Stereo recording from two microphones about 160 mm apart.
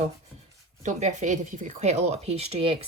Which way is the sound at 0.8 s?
45° right (ahead or behind).